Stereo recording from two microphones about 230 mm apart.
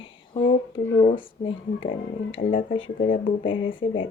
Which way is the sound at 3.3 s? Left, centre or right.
Left.